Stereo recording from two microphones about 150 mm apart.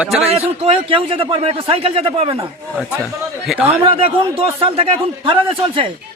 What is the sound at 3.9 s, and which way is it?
Speech, 40° right (ahead or behind).